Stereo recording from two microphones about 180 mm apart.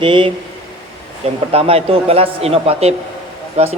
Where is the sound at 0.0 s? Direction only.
30° right (ahead or behind).